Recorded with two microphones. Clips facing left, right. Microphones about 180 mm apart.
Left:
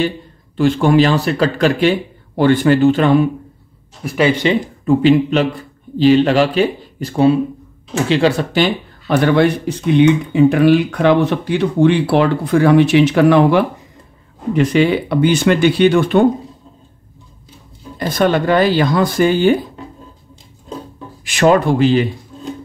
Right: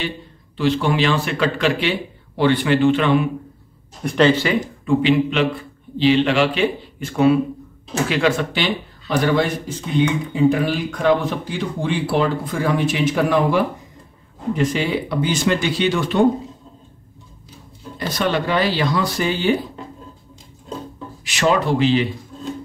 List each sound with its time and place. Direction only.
0.6 s speech: 45° left (ahead or behind)
4.0 s speech: 5° left (ahead or behind)
4.8 s a man's voice: 40° left (ahead or behind)
9.0 s speech: 60° left (ahead or behind)
17.9 s speech: 50° left (ahead or behind)
21.2 s speech: 50° left (ahead or behind)